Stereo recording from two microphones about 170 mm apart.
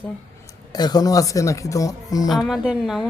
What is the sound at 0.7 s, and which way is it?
Speech, 25° left (ahead or behind).